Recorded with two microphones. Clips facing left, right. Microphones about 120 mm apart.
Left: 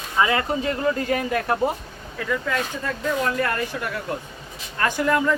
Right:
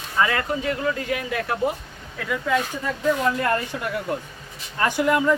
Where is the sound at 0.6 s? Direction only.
35° left (ahead or behind).